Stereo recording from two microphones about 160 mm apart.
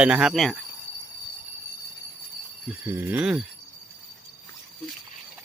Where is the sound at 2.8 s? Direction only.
15° right (ahead or behind).